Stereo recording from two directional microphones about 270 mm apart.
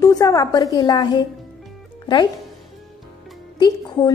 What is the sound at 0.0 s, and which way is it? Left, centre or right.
A woman's voice, centre.